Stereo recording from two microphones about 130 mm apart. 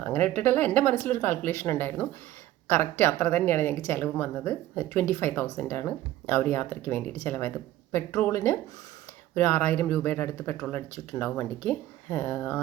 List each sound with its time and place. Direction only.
0.0 s speech: 15° left (ahead or behind)